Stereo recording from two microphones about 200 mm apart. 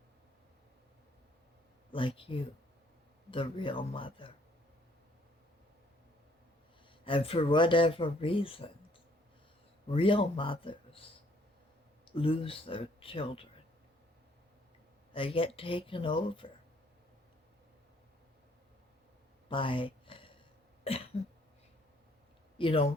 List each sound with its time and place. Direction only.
1.9 s speech: 25° left (ahead or behind)
7.0 s speech: 25° left (ahead or behind)
9.9 s speech: 25° left (ahead or behind)
15.1 s speech: 25° left (ahead or behind)
19.5 s a sound: 25° left (ahead or behind)
20.9 s cough: 30° left (ahead or behind)
22.5 s speech: 25° left (ahead or behind)